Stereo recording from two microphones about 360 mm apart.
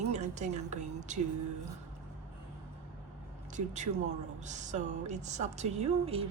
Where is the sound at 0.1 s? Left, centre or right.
Centre.